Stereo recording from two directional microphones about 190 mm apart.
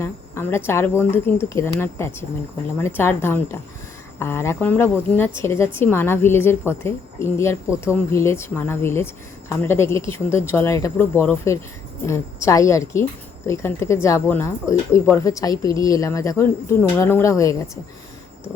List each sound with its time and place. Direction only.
0.0 s cricket: 15° left (ahead or behind)
0.7 s speech: 15° left (ahead or behind)